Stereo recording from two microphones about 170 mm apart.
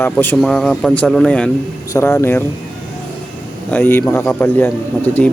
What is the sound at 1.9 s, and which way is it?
Speech, 15° left (ahead or behind).